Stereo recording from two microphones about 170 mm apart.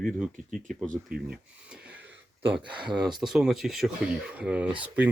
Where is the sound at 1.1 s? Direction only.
60° right (ahead or behind).